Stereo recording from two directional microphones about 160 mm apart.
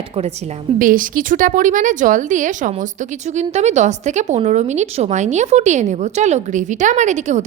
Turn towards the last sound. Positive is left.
turn(degrees=-50)  # may be behind; listen again after turning